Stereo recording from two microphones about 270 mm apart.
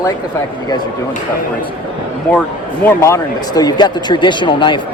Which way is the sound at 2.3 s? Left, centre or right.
Centre.